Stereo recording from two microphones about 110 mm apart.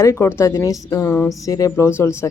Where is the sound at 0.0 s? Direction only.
25° left (ahead or behind).